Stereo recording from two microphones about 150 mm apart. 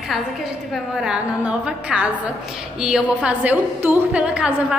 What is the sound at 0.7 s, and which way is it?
A woman's voice, 5° right (ahead or behind).